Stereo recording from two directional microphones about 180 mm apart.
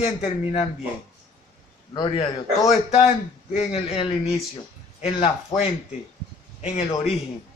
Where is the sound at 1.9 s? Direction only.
25° left (ahead or behind).